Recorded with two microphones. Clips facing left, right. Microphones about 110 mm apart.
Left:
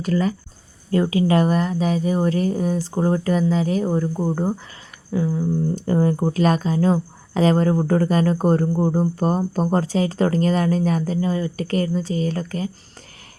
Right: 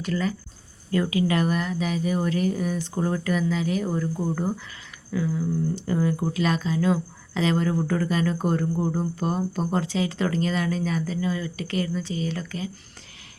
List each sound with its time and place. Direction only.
0.0 s speech: 40° left (ahead or behind)